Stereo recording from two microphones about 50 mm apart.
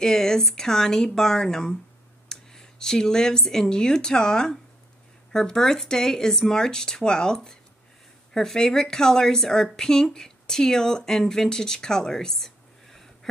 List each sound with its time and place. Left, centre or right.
0.0 s speech: centre